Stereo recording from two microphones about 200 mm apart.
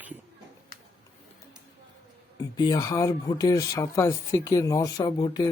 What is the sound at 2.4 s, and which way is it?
Speech, 20° left (ahead or behind).